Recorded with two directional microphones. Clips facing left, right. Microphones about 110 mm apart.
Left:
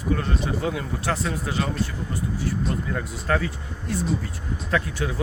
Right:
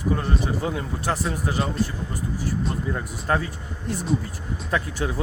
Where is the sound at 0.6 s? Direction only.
30° right (ahead or behind).